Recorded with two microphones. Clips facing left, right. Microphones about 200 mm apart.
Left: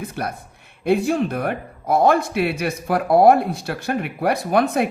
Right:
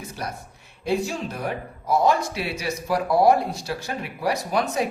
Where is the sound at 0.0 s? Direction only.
60° left (ahead or behind).